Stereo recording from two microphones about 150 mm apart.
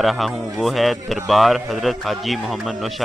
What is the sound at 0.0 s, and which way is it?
A man's voice, centre (ahead or behind).